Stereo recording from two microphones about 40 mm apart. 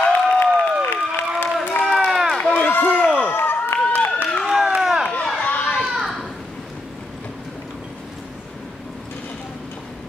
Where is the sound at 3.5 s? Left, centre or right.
Left.